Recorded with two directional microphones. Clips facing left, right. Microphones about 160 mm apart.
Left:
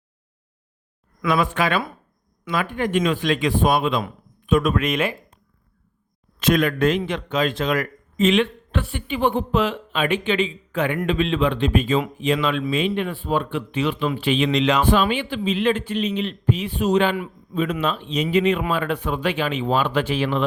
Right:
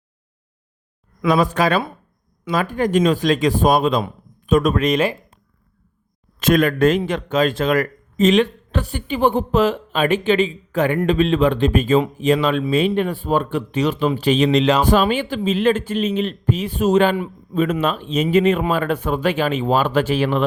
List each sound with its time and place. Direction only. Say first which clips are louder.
1.3 s speech: right 4 dB; 40° right (ahead or behind)
6.4 s a man's voice: right 3 dB; 45° right (ahead or behind)